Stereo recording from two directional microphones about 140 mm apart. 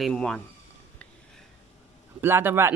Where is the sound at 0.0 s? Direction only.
5° left (ahead or behind).